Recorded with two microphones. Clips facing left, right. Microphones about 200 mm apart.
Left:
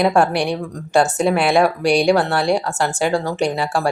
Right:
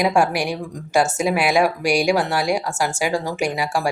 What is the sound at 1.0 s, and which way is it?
Speech, 35° left (ahead or behind).